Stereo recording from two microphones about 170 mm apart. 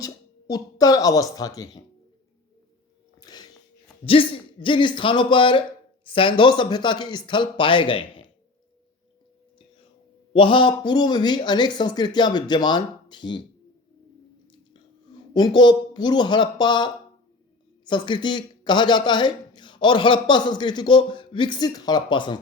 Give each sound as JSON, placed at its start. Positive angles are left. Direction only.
{"t": 0.0, "sound": "speech", "side_deg": 20}
{"t": 3.2, "sound": "a sound", "side_deg": 25}
{"t": 4.0, "sound": "a man's voice", "side_deg": 30}
{"t": 10.3, "sound": "a man's voice", "side_deg": 30}
{"t": 15.3, "sound": "a man's voice", "side_deg": 25}